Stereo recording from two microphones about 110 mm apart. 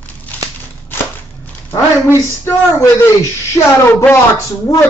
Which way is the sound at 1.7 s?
25° left (ahead or behind).